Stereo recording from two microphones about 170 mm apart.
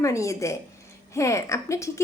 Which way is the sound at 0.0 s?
20° left (ahead or behind).